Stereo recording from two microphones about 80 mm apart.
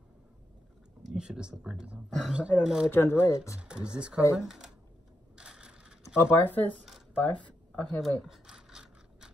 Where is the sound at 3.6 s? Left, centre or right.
Centre.